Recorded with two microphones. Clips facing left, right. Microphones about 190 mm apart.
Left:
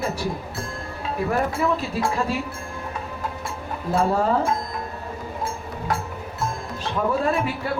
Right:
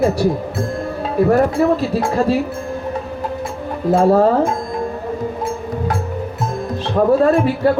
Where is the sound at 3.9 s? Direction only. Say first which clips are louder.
Right 9 dB; 50° right (ahead or behind).